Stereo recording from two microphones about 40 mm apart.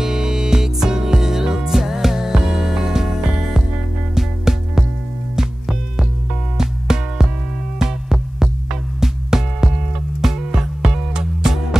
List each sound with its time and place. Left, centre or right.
0.0 s music: centre